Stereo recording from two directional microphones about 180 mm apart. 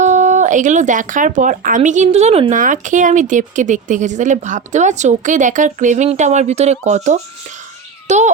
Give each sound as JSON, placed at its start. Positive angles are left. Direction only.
{"t": 0.0, "sound": "a child's voice", "side_deg": -40}